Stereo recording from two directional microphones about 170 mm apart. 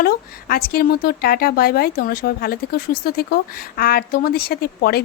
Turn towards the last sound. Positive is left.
turn(degrees=65)  # may be behind; listen again after turning